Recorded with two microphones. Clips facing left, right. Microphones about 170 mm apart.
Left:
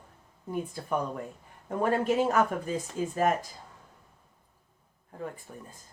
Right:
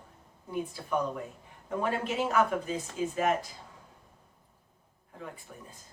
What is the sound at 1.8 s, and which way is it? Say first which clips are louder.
Speech: left 5 dB; 45° left (ahead or behind).